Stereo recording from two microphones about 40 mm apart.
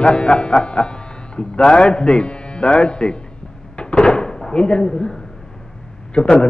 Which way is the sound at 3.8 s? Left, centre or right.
Left.